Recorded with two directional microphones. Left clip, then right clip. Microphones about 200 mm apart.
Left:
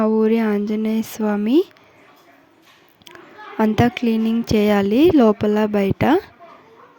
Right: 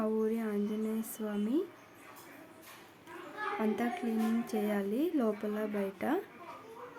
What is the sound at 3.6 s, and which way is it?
A woman's voice, 45° left (ahead or behind).